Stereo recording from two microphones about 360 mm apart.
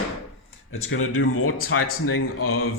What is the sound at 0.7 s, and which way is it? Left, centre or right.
Speech, left.